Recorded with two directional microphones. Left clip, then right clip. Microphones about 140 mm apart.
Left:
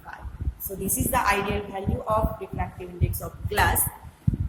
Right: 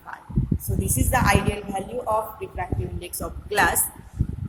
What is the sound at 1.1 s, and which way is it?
Speech, 40° right (ahead or behind).